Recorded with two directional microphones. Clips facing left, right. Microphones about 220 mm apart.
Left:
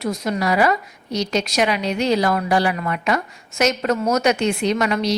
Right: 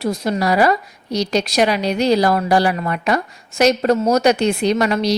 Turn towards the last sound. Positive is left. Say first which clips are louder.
# right 3 dB
turn(degrees=-35)  # may be behind; listen again after turning